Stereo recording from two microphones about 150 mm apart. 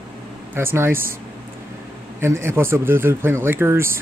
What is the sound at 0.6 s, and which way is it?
Speech, 15° right (ahead or behind).